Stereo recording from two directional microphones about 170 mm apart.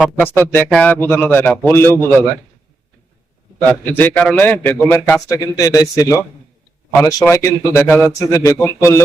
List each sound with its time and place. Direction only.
0.2 s a man's voice: 10° left (ahead or behind)
3.7 s a man's voice: 10° left (ahead or behind)